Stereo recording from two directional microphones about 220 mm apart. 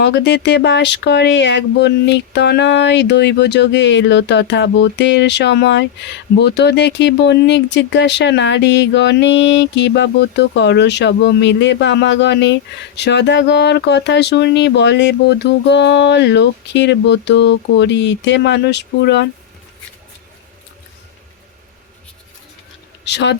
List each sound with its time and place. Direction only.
0.0 s speech: 50° left (ahead or behind)
23.0 s speech: 50° left (ahead or behind)